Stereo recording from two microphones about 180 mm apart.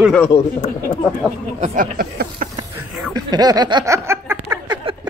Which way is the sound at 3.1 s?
20° right (ahead or behind).